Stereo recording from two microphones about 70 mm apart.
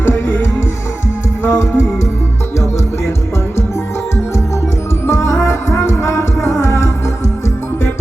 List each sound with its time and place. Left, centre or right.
0.0 s music: left
1.5 s music: left
5.0 s music: left